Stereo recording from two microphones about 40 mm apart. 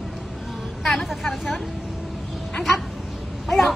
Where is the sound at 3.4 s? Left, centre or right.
Centre.